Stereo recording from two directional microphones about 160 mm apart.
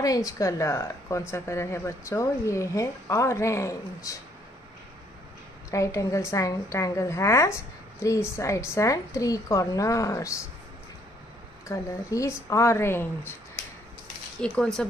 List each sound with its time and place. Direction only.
0.0 s a woman's voice: 20° left (ahead or behind)
5.7 s a woman's voice: 20° left (ahead or behind)
11.6 s a woman's voice: 20° left (ahead or behind)
14.4 s speech: 5° left (ahead or behind)